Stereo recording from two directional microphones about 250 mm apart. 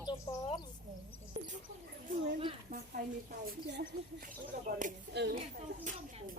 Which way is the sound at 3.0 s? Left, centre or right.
Right.